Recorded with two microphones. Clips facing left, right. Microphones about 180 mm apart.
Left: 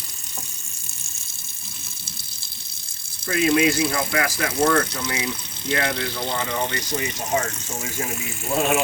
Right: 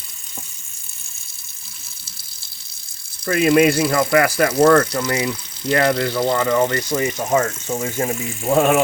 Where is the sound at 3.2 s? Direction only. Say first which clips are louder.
Right 5 dB; 60° right (ahead or behind).